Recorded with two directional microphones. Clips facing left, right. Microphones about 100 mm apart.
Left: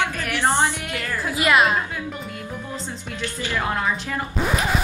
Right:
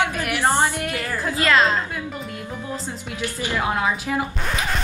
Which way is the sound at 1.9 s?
Centre (ahead or behind).